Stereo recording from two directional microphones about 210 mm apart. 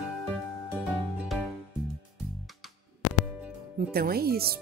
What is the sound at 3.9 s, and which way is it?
Speech, 45° right (ahead or behind).